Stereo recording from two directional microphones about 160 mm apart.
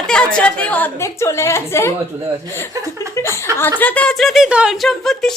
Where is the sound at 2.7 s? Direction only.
20° right (ahead or behind).